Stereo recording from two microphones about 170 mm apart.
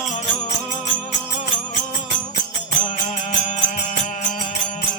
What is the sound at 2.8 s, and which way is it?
Music, 45° left (ahead or behind).